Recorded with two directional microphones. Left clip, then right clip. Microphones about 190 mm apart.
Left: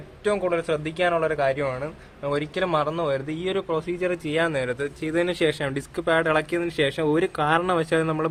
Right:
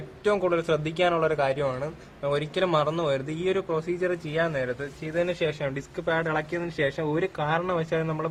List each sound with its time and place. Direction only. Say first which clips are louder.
0.3 s a man's voice: even; centre (ahead or behind); by 8.3 s 50° left (ahead or behind)